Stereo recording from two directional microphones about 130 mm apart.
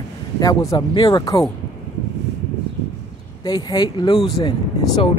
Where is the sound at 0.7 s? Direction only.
40° left (ahead or behind).